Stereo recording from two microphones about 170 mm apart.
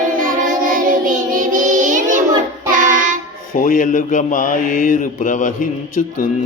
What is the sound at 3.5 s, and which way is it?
Mantra, 50° left (ahead or behind).